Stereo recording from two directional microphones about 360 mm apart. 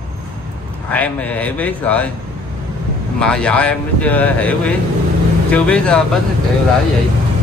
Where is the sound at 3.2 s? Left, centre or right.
Centre.